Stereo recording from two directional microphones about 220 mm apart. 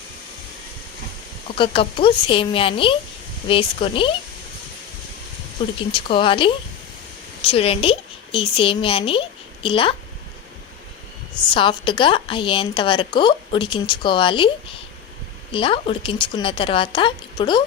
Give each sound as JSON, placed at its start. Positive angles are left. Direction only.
{"t": 1.5, "sound": "a woman's voice", "side_deg": 25}
{"t": 5.9, "sound": "a woman's voice", "side_deg": 25}
{"t": 11.5, "sound": "a woman's voice", "side_deg": 20}
{"t": 15.5, "sound": "a woman's voice", "side_deg": 25}